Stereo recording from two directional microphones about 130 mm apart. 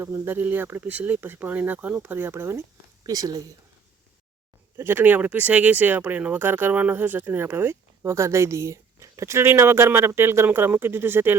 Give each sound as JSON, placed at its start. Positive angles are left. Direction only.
{"t": 0.0, "sound": "speech", "side_deg": -20}
{"t": 4.8, "sound": "speech", "side_deg": -15}